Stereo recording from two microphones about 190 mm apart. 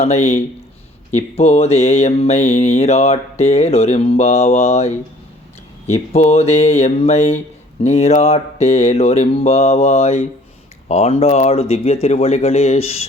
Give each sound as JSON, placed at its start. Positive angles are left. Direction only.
{"t": 0.0, "sound": "speech", "side_deg": 35}
{"t": 5.9, "sound": "speech", "side_deg": 35}